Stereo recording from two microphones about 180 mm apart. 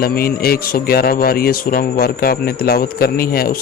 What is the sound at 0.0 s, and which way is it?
A man's voice, 55° left (ahead or behind).